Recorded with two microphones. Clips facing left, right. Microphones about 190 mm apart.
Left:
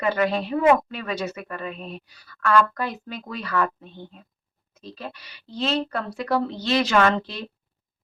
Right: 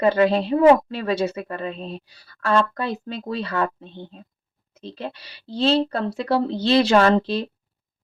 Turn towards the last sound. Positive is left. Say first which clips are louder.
# right 4 dB
turn(degrees=-30)  # may be behind; listen again after turning